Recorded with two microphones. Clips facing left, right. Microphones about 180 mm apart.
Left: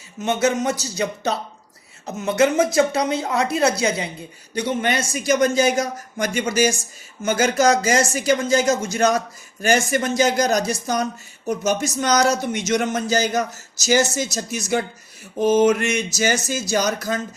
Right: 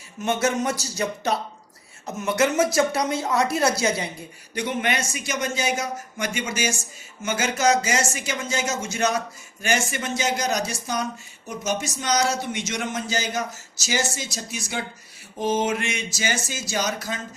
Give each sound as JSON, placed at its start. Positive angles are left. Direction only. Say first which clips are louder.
{"t": 0.2, "sound": "speech", "louder": "left 3 dB", "side_deg": 20}
{"t": 4.5, "sound": "speech", "louder": "left 4 dB", "side_deg": 35}